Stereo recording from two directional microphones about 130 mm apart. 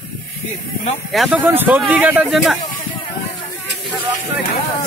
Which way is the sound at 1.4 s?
15° right (ahead or behind).